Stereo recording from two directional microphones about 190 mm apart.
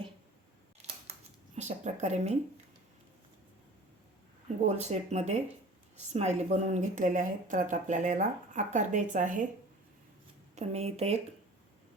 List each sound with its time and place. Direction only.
0.8 s scissors: 35° right (ahead or behind)
1.5 s speech: 40° right (ahead or behind)
4.6 s speech: 35° right (ahead or behind)
10.5 s speech: 35° right (ahead or behind)